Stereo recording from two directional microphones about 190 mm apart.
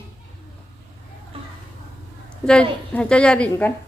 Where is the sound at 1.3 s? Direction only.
30° right (ahead or behind).